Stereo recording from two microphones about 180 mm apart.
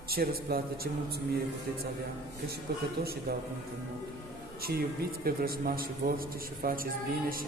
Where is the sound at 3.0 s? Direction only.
60° right (ahead or behind).